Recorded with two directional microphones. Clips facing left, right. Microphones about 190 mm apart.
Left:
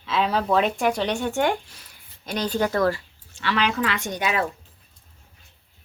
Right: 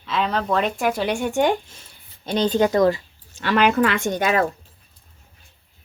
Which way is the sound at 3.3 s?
45° right (ahead or behind).